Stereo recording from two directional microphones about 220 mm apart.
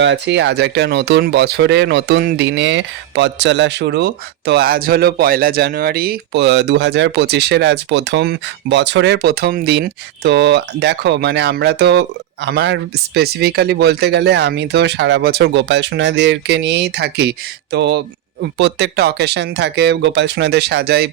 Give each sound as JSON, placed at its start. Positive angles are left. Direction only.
{"t": 0.0, "sound": "speech", "side_deg": -55}